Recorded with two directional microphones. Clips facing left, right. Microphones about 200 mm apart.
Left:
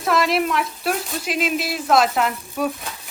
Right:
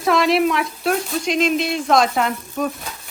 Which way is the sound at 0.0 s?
Centre (ahead or behind).